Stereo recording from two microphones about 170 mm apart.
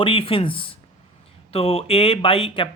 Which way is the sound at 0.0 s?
30° left (ahead or behind).